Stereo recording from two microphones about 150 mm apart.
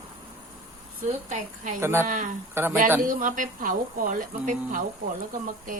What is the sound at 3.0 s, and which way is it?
Speech, 60° right (ahead or behind).